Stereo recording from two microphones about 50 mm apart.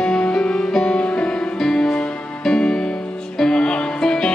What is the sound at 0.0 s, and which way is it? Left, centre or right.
Music, centre.